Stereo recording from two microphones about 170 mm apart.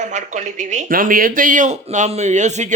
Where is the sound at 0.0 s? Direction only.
45° right (ahead or behind).